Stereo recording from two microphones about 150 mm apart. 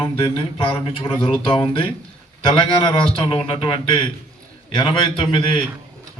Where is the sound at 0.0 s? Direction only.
40° left (ahead or behind).